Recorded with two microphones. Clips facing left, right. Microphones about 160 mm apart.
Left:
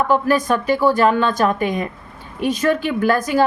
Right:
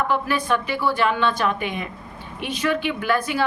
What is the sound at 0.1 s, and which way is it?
A woman's voice, 40° left (ahead or behind).